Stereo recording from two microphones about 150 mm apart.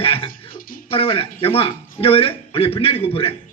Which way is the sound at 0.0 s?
40° left (ahead or behind).